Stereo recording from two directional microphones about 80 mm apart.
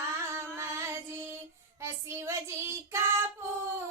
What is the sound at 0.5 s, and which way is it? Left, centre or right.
Child singing, right.